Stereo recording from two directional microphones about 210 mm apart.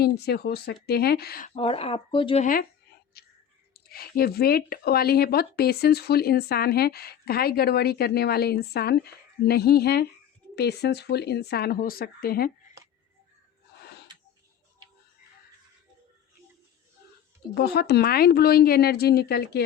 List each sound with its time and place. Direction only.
0.0 s speech: 50° left (ahead or behind)
1.5 s speech: 25° left (ahead or behind)
3.1 s whispering: 45° left (ahead or behind)
3.8 s speech: 45° left (ahead or behind)
17.5 s speech: 50° left (ahead or behind)